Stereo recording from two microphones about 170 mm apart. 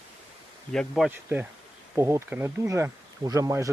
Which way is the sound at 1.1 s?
10° right (ahead or behind).